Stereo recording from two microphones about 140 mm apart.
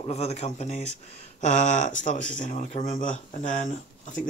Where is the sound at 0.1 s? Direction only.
50° left (ahead or behind).